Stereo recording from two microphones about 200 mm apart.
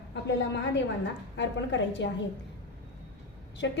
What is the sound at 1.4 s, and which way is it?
Speech, 65° left (ahead or behind).